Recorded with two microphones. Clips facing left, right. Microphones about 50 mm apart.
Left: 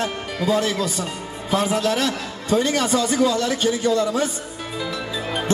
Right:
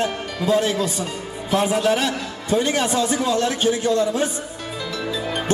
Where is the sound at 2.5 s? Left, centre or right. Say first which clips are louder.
Left 1 dB; right.